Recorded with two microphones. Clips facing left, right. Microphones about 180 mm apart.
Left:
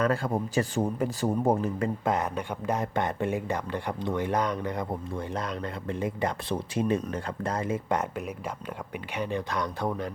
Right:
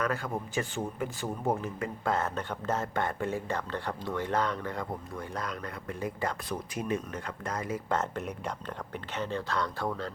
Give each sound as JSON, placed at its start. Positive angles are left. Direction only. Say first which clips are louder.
{"t": 0.0, "sound": "a man's voice", "louder": "left 5 dB", "side_deg": 30}
{"t": 2.0, "sound": "speech", "louder": "right 1 dB", "side_deg": 15}
{"t": 7.9, "sound": "speech", "louder": "left 2 dB", "side_deg": 15}